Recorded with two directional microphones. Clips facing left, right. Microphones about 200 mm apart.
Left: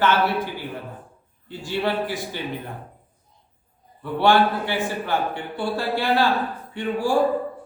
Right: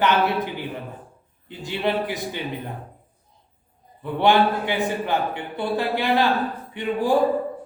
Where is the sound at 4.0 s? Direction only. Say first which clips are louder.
Even; 20° right (ahead or behind).